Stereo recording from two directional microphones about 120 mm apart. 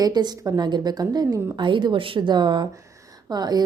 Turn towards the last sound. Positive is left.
turn(degrees=-35)  # may be behind; listen again after turning